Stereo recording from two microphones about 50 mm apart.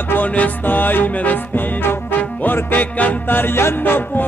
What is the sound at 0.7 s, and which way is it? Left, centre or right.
Music, left.